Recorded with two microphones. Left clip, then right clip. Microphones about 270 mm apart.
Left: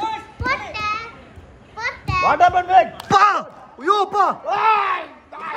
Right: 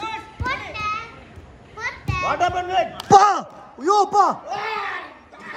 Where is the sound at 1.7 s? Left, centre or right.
Left.